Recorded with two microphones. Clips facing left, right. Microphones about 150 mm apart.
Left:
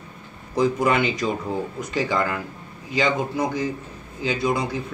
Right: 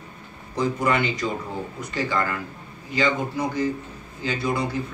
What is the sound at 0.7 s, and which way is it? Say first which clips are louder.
A man's voice: left 2 dB; 15° left (ahead or behind).